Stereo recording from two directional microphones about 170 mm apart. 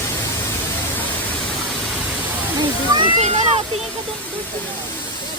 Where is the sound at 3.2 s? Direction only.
40° right (ahead or behind).